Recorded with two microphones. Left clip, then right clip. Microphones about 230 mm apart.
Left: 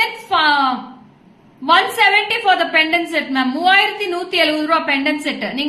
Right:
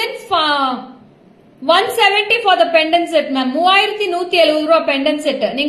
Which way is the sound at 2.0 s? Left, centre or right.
Centre.